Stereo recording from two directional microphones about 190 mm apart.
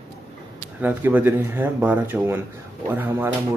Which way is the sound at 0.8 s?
10° right (ahead or behind).